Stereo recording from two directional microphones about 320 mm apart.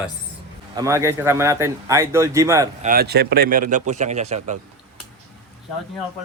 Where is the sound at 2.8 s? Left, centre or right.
Right.